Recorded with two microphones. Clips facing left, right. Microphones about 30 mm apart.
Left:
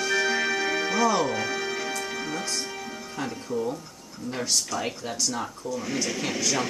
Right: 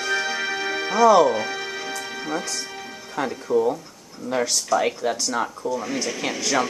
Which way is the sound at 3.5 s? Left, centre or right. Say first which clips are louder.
Right 9 dB; right.